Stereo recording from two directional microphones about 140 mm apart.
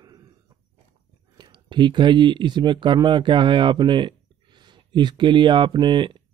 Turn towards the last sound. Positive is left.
turn(degrees=-35)  # may be behind; listen again after turning